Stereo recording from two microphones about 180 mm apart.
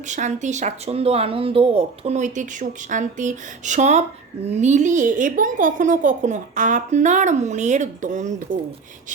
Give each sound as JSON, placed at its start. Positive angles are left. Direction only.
{"t": 0.1, "sound": "a woman's voice", "side_deg": -40}